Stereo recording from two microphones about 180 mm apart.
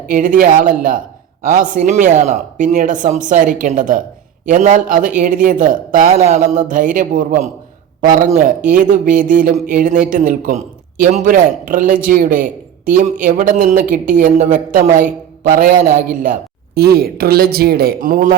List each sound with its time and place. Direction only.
0.1 s a man's voice: 50° right (ahead or behind)